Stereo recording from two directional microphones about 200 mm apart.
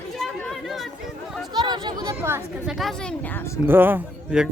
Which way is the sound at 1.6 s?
20° right (ahead or behind).